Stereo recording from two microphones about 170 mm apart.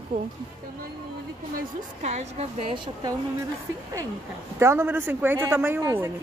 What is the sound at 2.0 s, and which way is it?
Speech, 40° right (ahead or behind).